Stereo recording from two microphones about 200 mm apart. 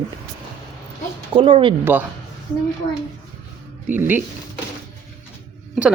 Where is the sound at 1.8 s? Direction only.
10° right (ahead or behind).